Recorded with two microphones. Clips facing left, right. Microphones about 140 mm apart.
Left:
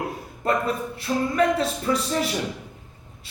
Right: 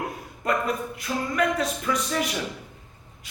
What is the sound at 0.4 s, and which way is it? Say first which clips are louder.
A man's voice: left 2 dB; 30° left (ahead or behind).